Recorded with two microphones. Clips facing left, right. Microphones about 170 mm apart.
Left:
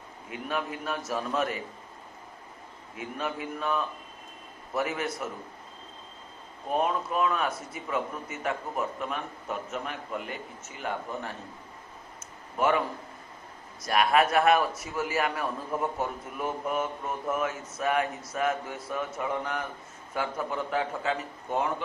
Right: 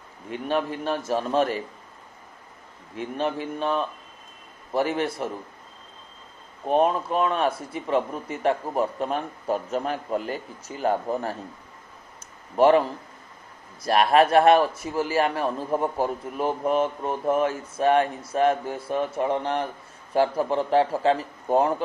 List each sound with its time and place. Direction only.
0.3 s a man's voice: 30° right (ahead or behind)
3.0 s a man's voice: 30° right (ahead or behind)
6.7 s a man's voice: 30° right (ahead or behind)
12.5 s a man's voice: 30° right (ahead or behind)
13.8 s a man's voice: 30° right (ahead or behind)